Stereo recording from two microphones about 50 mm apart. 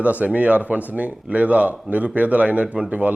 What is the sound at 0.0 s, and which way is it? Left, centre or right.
A man's voice, right.